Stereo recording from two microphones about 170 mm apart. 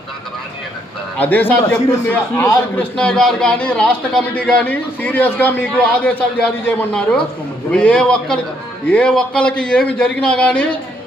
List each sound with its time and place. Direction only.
1.2 s a man's voice: 10° left (ahead or behind)
2.4 s a man's voice: 20° left (ahead or behind)
2.9 s a man's voice: 5° left (ahead or behind)